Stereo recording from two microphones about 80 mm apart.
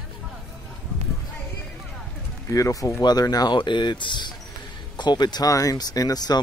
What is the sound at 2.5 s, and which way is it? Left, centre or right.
Speech, left.